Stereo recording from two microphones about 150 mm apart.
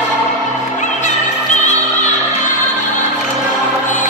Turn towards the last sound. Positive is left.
turn(degrees=50)  # may be behind; listen again after turning